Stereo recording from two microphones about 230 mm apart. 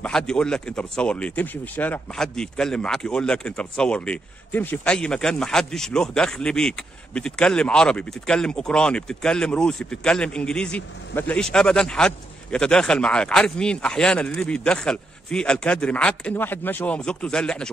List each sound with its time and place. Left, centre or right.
0.0 s speech: centre